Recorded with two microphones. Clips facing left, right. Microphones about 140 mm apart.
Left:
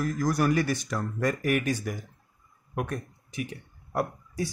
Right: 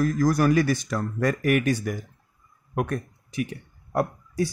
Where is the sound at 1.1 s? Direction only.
70° right (ahead or behind).